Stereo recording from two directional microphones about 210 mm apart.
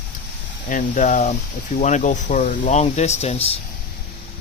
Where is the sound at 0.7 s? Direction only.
35° left (ahead or behind).